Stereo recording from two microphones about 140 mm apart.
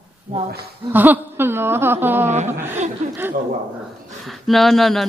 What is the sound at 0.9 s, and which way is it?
A woman's voice, 15° right (ahead or behind).